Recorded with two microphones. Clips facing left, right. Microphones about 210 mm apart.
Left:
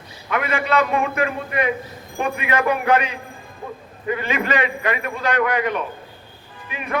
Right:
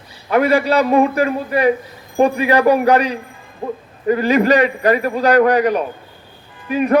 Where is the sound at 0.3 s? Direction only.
35° right (ahead or behind).